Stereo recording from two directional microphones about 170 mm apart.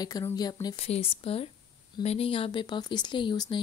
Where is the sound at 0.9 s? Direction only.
35° left (ahead or behind).